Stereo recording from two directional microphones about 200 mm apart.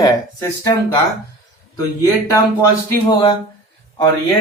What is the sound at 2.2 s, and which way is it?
Speech, 15° left (ahead or behind).